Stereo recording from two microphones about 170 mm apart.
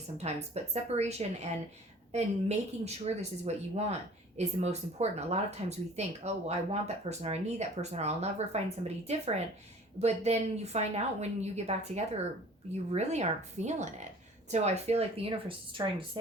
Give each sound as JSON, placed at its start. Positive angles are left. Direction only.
{"t": 0.2, "sound": "speech", "side_deg": -40}